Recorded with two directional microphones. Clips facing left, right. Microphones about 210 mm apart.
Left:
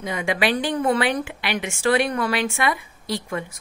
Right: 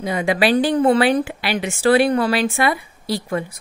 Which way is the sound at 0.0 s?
35° right (ahead or behind).